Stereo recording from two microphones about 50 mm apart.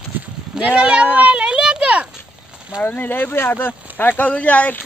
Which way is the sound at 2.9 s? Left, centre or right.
Left.